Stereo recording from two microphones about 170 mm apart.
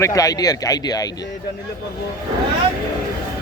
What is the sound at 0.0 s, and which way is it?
Speech, 20° left (ahead or behind).